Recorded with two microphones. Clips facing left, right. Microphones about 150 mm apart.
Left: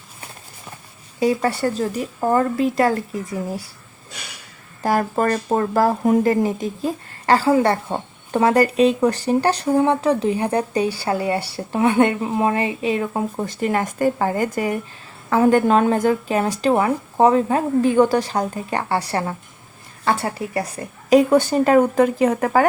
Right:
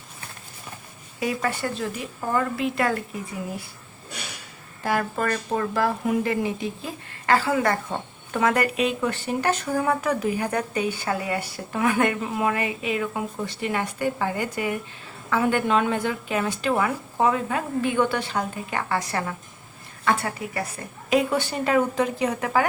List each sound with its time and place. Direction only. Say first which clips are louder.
1.2 s speech: left 7 dB; 30° left (ahead or behind)
4.8 s speech: left 6 dB; 40° left (ahead or behind)
21.1 s a woman's voice: left 8 dB; 45° left (ahead or behind)